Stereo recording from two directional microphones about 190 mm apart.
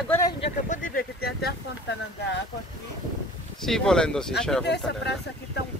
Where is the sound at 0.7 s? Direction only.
45° left (ahead or behind).